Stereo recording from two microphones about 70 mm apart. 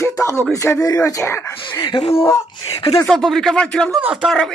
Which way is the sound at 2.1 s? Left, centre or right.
Left.